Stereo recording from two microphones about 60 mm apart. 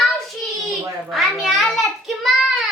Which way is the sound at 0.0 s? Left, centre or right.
Centre.